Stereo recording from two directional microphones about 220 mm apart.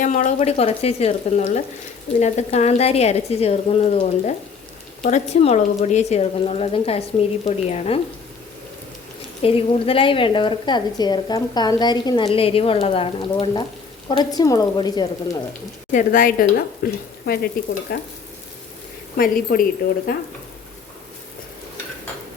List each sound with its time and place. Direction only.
0.0 s a woman's voice: 35° left (ahead or behind)
9.4 s a woman's voice: 25° left (ahead or behind)
15.9 s speech: 35° left (ahead or behind)
17.9 s a woman's voice: 45° left (ahead or behind)
19.1 s a woman's voice: 40° left (ahead or behind)